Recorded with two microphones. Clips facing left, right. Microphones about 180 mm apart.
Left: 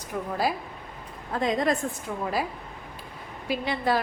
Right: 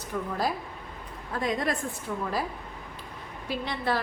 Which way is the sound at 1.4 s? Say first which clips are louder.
Left 4 dB; 20° left (ahead or behind).